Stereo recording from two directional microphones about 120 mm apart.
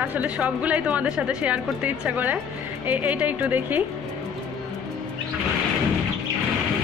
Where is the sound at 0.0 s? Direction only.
15° right (ahead or behind).